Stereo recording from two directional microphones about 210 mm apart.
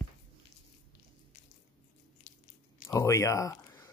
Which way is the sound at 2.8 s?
15° left (ahead or behind).